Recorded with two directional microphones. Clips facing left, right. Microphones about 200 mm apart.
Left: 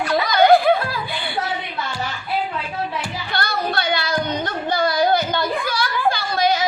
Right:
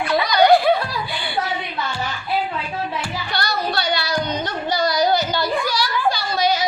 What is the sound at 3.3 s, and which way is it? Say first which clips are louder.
Child singing: left 1 dB; 50° left (ahead or behind).